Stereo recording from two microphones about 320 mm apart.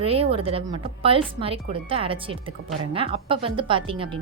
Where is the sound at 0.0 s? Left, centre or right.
Centre.